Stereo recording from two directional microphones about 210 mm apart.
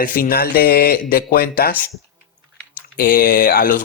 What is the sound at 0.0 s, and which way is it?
Speech, 45° left (ahead or behind).